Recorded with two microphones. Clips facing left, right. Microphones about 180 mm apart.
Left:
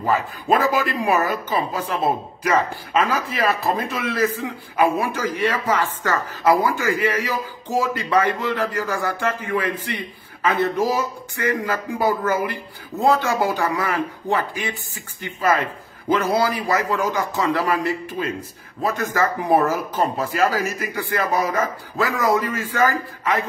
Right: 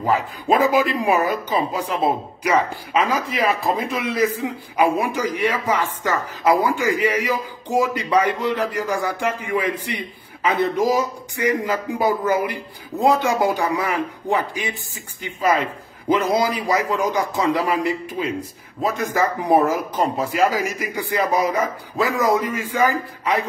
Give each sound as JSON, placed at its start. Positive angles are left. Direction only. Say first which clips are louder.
{"t": 0.0, "sound": "speech", "louder": "right 1 dB", "side_deg": -15}
{"t": 18.8, "sound": "speech", "louder": "right 1 dB", "side_deg": -15}